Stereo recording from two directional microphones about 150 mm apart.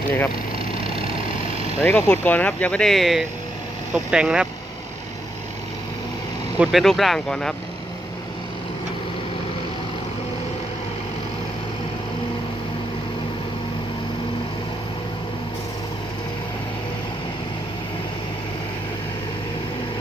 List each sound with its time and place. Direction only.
0.9 s vehicle: 40° right (ahead or behind)
1.8 s speech: 10° left (ahead or behind); by 4.4 s 5° right (ahead or behind)
6.6 s speech: centre (ahead or behind)